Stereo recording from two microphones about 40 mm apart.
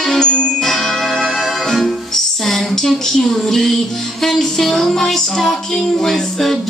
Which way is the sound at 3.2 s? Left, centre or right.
Centre.